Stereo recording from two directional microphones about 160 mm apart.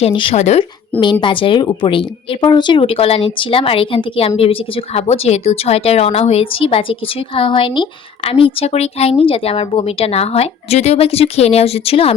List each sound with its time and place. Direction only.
0.0 s a woman's voice: 35° left (ahead or behind)
1.2 s a woman's voice: 30° left (ahead or behind)